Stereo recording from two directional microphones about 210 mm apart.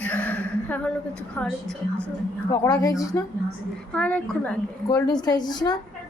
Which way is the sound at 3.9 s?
5° left (ahead or behind).